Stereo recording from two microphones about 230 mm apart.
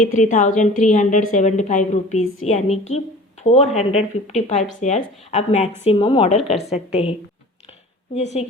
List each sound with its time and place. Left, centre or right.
0.2 s a woman's voice: left
2.2 s a woman's voice: left
2.5 s speech: left